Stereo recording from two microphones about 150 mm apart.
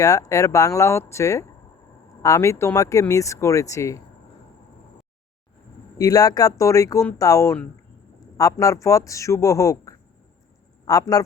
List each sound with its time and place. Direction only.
0.0 s speech: 20° left (ahead or behind)
6.0 s speech: 25° left (ahead or behind)